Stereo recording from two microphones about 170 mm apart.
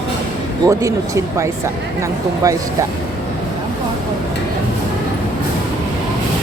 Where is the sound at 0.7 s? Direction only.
20° right (ahead or behind).